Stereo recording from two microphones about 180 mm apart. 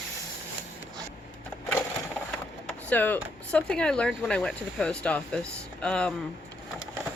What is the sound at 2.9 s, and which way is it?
Speech, 10° left (ahead or behind).